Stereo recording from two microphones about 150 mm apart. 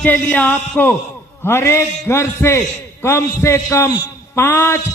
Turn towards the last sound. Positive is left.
turn(degrees=15)  # may be behind; listen again after turning